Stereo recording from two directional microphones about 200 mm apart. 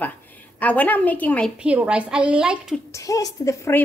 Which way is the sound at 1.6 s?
5° right (ahead or behind).